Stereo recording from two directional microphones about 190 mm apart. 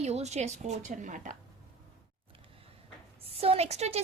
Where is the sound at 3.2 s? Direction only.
30° right (ahead or behind).